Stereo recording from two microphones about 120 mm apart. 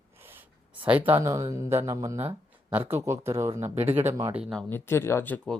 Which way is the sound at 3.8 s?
60° right (ahead or behind).